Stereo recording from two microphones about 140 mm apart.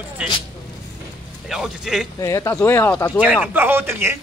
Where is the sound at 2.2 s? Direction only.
25° left (ahead or behind).